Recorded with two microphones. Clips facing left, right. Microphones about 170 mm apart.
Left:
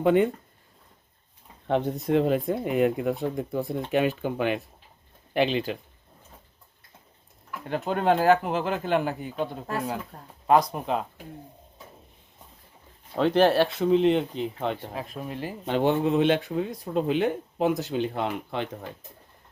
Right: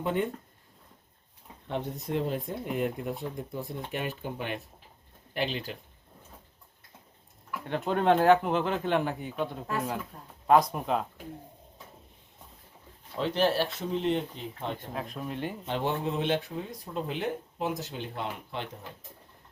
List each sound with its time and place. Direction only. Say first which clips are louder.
0.0 s speech: left 9 dB; 90° left
1.6 s speech: left 8 dB; 90° left
7.6 s speech: left 1 dB; 5° left (ahead or behind)
13.1 s speech: left 7 dB; 65° left (ahead or behind); by 14.8 s 85° left
14.9 s speech: left 1 dB; 5° left (ahead or behind)
15.6 s speech: left 9 dB; 65° left (ahead or behind); by 18.9 s 85° left